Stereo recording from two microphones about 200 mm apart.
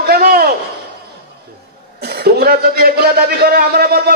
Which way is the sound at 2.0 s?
55° right (ahead or behind).